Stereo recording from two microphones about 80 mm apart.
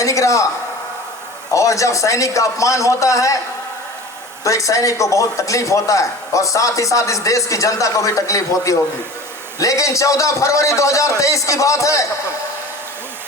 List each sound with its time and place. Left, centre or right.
0.0 s a man's voice: left
1.5 s a man's voice: left
4.4 s a man's voice: left